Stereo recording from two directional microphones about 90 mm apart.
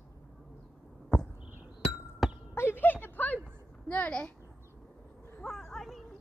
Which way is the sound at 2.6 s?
25° left (ahead or behind).